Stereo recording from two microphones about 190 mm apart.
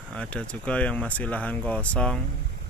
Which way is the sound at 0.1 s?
5° left (ahead or behind).